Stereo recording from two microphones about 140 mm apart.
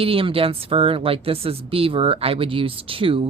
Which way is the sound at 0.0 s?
40° right (ahead or behind).